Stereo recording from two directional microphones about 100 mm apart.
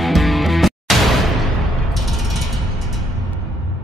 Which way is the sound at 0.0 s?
Centre (ahead or behind).